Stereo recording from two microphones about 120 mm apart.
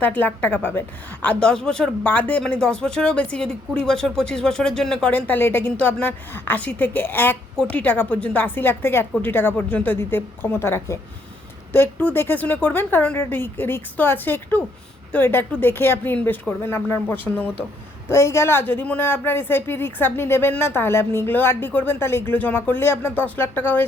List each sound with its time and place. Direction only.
0.0 s a woman's voice: 15° left (ahead or behind)